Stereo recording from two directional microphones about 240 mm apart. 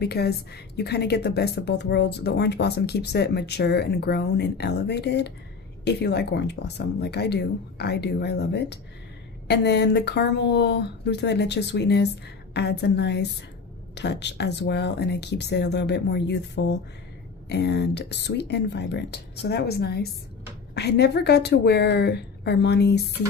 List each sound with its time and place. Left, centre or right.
0.0 s speech: left